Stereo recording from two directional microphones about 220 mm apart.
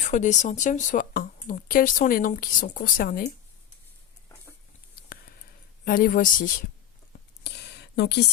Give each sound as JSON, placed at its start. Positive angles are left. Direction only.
{"t": 0.0, "sound": "speech", "side_deg": 35}
{"t": 5.8, "sound": "speech", "side_deg": 40}
{"t": 7.4, "sound": "a sound", "side_deg": 50}